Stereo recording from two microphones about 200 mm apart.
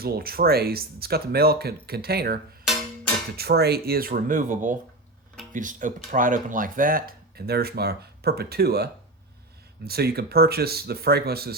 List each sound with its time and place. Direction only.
0.0 s speech: 50° right (ahead or behind)